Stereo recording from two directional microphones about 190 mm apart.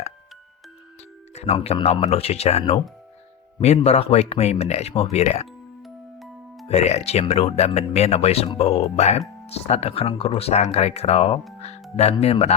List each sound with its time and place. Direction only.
1.3 s speech: 35° left (ahead or behind)
5.8 s music: centre (ahead or behind)
6.7 s speech: 35° left (ahead or behind)